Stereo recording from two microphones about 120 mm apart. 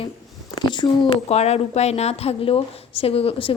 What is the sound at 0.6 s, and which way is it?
Speech, 40° left (ahead or behind).